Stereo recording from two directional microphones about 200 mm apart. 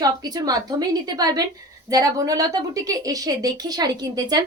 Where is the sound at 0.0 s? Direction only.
20° right (ahead or behind).